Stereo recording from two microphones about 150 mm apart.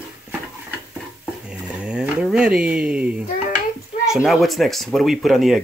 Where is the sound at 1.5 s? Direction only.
5° right (ahead or behind).